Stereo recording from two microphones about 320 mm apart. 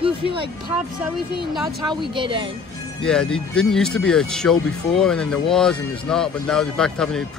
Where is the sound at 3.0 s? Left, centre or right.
Centre.